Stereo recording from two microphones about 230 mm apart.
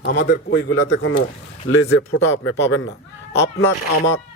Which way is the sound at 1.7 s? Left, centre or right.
Left.